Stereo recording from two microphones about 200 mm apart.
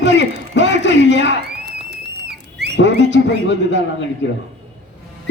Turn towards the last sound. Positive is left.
turn(degrees=65)  # may be behind; listen again after turning